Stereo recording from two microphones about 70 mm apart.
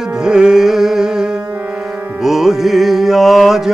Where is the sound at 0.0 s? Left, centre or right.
Centre.